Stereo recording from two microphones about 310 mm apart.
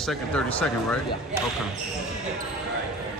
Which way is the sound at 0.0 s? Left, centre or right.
Centre.